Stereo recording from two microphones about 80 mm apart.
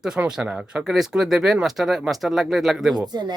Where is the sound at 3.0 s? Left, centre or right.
Right.